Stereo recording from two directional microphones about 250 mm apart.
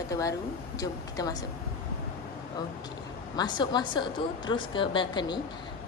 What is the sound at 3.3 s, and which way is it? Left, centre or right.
A woman's voice, centre.